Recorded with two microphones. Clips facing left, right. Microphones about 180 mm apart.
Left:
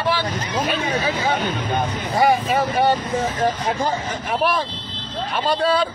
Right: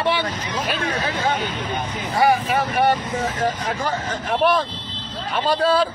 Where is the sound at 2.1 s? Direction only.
25° left (ahead or behind).